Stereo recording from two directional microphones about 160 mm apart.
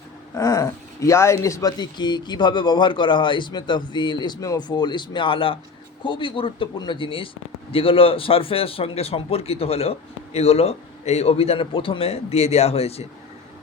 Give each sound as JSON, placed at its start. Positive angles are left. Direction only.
{"t": 0.3, "sound": "a man's voice", "side_deg": 20}